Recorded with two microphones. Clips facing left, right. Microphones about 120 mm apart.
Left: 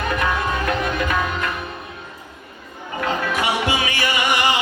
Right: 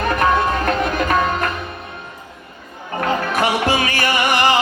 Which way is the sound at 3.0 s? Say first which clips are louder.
Right 3 dB; 45° right (ahead or behind).